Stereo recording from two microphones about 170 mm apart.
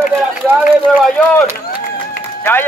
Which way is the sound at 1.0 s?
5° left (ahead or behind).